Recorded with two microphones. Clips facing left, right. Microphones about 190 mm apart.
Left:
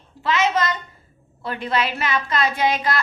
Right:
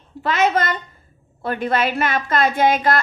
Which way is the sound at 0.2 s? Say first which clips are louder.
Right 2 dB; 55° right (ahead or behind).